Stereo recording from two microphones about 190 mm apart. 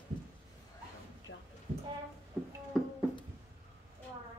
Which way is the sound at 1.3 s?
90° left.